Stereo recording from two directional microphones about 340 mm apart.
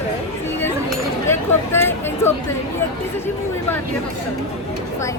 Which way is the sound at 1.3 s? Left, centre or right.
Centre.